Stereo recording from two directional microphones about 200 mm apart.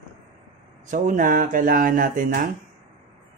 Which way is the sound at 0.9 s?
40° right (ahead or behind).